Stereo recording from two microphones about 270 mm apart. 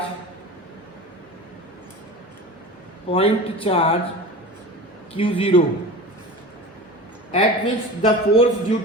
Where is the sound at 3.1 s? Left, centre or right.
Left.